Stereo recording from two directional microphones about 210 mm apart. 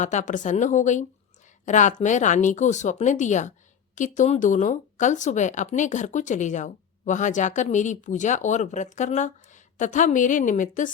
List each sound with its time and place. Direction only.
0.0 s speech: 35° left (ahead or behind)